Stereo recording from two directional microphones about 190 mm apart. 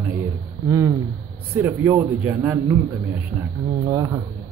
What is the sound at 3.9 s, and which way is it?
Speech, 15° right (ahead or behind).